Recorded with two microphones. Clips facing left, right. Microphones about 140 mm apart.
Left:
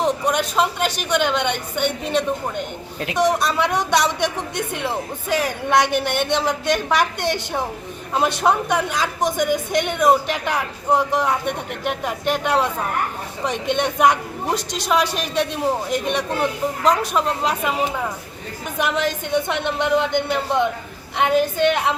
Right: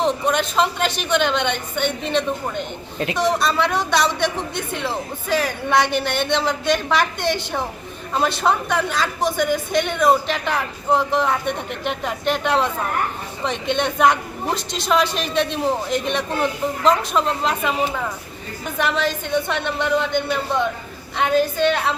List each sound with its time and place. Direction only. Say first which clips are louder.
0.0 s a woman's voice: even; 10° left (ahead or behind)
18.8 s a woman's voice: even; 15° left (ahead or behind)